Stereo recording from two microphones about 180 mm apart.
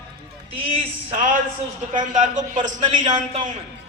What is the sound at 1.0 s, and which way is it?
A man's voice, 45° right (ahead or behind).